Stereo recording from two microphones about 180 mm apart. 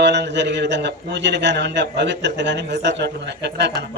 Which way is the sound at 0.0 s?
70° right (ahead or behind).